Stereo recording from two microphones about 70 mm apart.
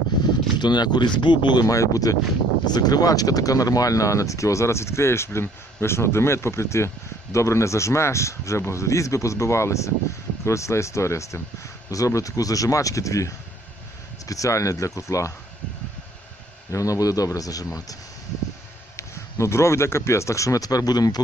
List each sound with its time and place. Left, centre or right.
0.6 s speech: left
1.7 s a man's voice: left
2.6 s speech: left
16.7 s a man's voice: left
18.9 s speech: left